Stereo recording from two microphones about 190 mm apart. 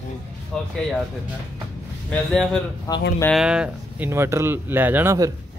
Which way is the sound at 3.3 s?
5° right (ahead or behind).